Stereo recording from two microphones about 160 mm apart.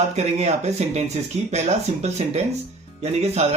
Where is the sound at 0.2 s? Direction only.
45° right (ahead or behind).